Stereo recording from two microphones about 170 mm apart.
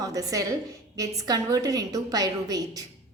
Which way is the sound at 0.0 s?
20° right (ahead or behind).